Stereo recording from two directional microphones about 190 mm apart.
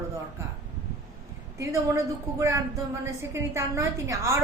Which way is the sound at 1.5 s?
15° right (ahead or behind).